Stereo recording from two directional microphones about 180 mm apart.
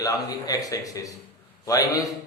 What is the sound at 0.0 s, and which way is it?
A man's voice, 20° left (ahead or behind).